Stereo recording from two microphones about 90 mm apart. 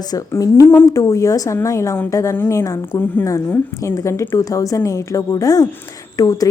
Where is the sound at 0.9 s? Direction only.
40° left (ahead or behind).